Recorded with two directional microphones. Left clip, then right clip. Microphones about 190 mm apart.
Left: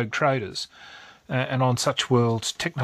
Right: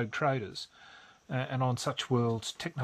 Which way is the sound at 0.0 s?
30° left (ahead or behind).